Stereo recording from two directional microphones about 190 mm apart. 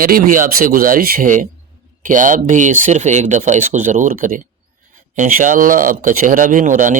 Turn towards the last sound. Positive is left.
turn(degrees=-40)  # may be behind; listen again after turning